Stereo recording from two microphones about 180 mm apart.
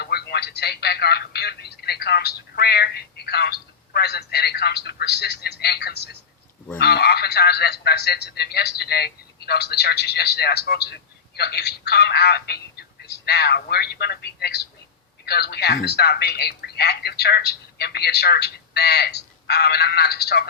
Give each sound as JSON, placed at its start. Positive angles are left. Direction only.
{"t": 0.0, "sound": "telephone", "side_deg": 60}
{"t": 6.7, "sound": "radio", "side_deg": 60}
{"t": 15.2, "sound": "telephone", "side_deg": 65}